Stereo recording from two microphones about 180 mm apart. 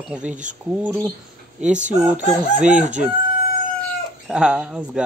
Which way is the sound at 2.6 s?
45° right (ahead or behind).